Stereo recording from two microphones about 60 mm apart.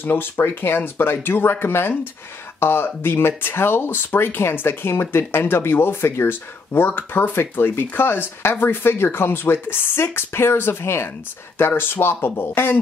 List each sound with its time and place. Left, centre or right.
0.0 s speech: left